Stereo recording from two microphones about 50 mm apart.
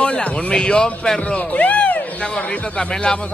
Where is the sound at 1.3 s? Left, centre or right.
Left.